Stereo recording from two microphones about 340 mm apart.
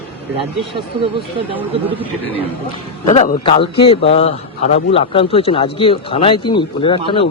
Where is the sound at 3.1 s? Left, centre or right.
Centre.